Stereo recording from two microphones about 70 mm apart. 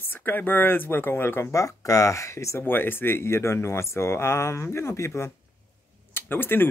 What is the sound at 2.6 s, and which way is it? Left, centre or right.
Speech, left.